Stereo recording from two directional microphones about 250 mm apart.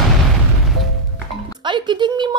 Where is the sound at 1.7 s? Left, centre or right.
Centre.